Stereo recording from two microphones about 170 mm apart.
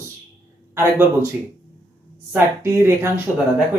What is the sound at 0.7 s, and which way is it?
Speech, 15° right (ahead or behind).